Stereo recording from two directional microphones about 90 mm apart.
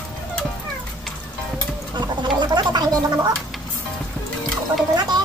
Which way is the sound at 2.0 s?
55° right (ahead or behind).